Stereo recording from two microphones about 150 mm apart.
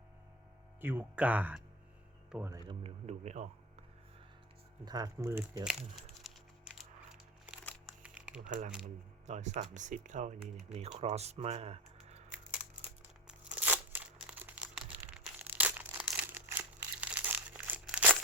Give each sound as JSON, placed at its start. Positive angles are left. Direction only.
{"t": 0.8, "sound": "speech", "side_deg": -15}
{"t": 2.5, "sound": "speech", "side_deg": -25}
{"t": 2.8, "sound": "speech", "side_deg": -50}
{"t": 4.9, "sound": "speech", "side_deg": -25}
{"t": 6.3, "sound": "crumpling", "side_deg": 0}
{"t": 6.7, "sound": "coin", "side_deg": -5}
{"t": 7.9, "sound": "crumpling", "side_deg": -5}
{"t": 8.4, "sound": "speech", "side_deg": -55}
{"t": 13.2, "sound": "a sound", "side_deg": -10}